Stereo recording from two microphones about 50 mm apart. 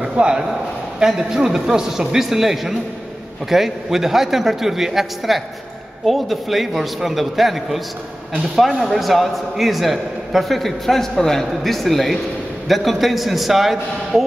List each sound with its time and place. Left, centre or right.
0.0 s a man's voice: centre